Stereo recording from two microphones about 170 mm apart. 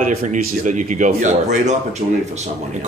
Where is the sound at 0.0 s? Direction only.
45° right (ahead or behind).